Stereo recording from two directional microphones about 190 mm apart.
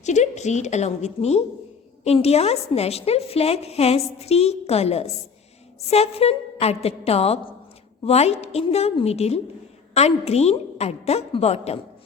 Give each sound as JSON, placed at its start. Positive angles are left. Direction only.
{"t": 0.0, "sound": "a woman's voice", "side_deg": 40}